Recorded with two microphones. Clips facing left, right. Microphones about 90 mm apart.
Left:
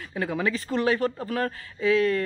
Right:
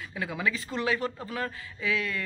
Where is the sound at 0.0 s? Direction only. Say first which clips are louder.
Left 4 dB; 40° left (ahead or behind).